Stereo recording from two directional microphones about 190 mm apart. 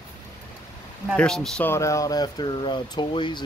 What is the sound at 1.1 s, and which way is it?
Speech, 5° left (ahead or behind).